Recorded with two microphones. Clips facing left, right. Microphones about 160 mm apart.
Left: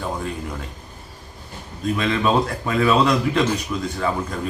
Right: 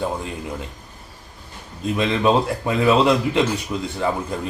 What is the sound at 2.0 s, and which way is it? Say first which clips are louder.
A man's voice: right 2 dB; 20° right (ahead or behind).